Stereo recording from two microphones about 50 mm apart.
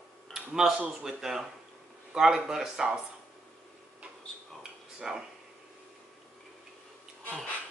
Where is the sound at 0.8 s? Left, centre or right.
Centre.